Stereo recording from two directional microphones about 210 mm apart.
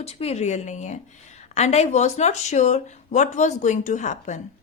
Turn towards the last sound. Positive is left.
turn(degrees=35)  # may be behind; listen again after turning